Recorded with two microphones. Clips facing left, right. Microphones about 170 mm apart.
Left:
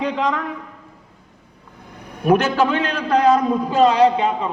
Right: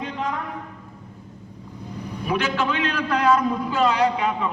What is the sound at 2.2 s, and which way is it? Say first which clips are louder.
A man's voice: left 8 dB; 50° left (ahead or behind).